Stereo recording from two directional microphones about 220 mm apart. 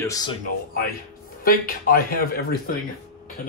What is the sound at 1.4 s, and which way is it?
Speech, 40° left (ahead or behind).